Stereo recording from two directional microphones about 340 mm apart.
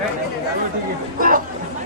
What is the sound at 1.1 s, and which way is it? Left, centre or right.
Speech, right.